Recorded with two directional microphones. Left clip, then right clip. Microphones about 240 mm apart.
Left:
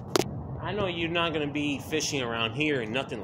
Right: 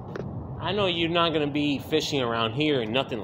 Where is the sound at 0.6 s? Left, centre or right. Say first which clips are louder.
Right 5 dB; right.